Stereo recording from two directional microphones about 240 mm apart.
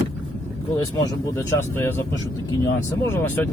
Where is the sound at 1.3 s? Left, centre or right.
Centre.